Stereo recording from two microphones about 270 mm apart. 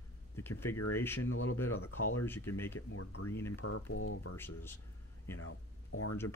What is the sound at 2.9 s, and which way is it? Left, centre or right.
Speech, left.